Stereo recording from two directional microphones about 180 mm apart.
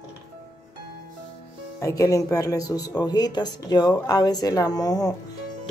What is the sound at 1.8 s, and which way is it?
Speech, 20° left (ahead or behind).